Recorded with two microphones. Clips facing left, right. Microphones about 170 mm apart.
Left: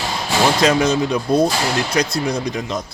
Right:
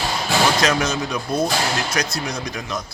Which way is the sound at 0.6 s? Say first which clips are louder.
Left 5 dB; 30° left (ahead or behind).